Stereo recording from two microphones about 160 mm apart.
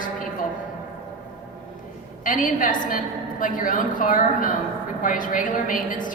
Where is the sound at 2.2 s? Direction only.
55° left (ahead or behind).